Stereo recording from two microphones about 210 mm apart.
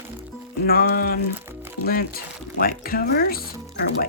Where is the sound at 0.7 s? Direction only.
45° left (ahead or behind).